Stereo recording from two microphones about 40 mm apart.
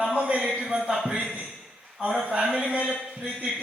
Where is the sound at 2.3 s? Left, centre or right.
Right.